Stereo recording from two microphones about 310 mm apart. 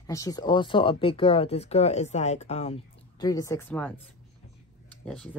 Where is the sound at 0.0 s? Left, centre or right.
Centre.